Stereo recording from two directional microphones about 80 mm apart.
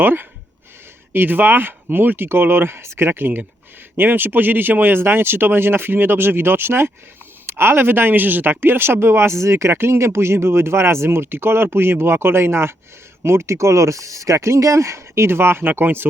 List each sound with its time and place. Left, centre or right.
0.0 s speech: right